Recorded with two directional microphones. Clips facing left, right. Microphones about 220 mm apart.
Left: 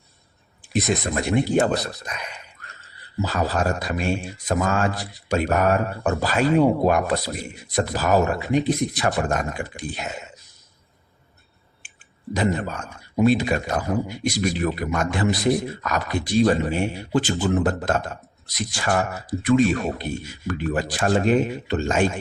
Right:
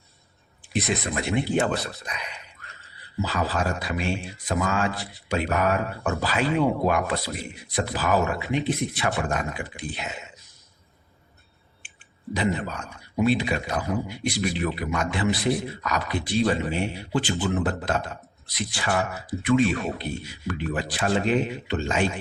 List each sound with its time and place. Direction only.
0.7 s speech: 45° left (ahead or behind)
11.8 s clicking: 40° left (ahead or behind)
12.3 s speech: 45° left (ahead or behind)